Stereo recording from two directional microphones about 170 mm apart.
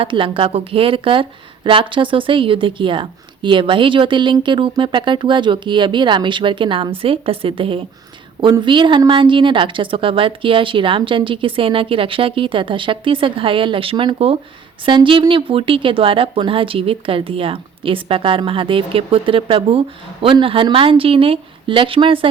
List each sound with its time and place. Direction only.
0.0 s a woman's voice: 30° right (ahead or behind)